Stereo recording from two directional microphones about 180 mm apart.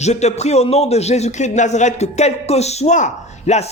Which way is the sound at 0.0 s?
40° left (ahead or behind).